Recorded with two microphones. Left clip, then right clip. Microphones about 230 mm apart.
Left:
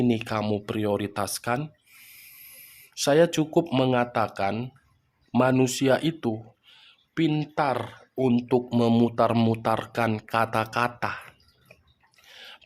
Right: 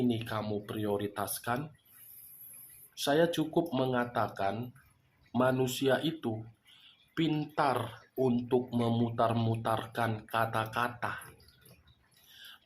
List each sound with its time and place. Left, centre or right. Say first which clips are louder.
0.1 s speech: left 8 dB; left
2.9 s speech: left 8 dB; left
12.3 s a sound: left 7 dB; left